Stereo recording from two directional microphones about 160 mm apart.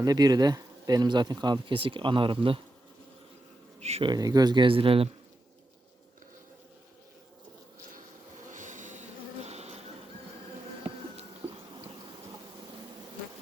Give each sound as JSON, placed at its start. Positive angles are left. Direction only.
{"t": 0.0, "sound": "speech", "side_deg": -25}
{"t": 3.8, "sound": "speech", "side_deg": -40}
{"t": 4.1, "sound": "speech", "side_deg": -25}
{"t": 8.4, "sound": "a sound", "side_deg": -50}
{"t": 11.7, "sound": "bee", "side_deg": -30}